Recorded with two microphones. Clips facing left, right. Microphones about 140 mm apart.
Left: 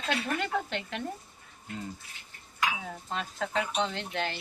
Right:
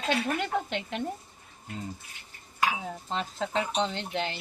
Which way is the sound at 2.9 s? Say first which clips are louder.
Right 3 dB; 25° right (ahead or behind).